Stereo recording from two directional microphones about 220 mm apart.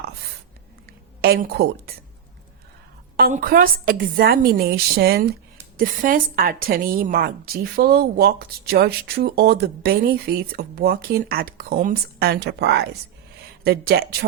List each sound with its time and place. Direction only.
1.2 s speech: 45° right (ahead or behind)
3.2 s a woman's voice: 40° right (ahead or behind)